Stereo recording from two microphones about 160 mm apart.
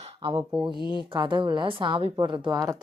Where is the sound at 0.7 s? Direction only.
30° left (ahead or behind).